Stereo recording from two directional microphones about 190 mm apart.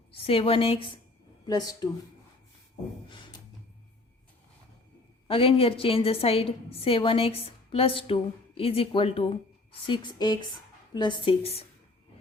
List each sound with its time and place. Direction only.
0.1 s a woman's voice: 30° left (ahead or behind)
3.1 s a sound: 25° left (ahead or behind)
5.3 s a woman's voice: 30° left (ahead or behind)